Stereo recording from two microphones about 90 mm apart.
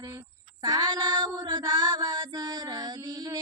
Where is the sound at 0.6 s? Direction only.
50° right (ahead or behind).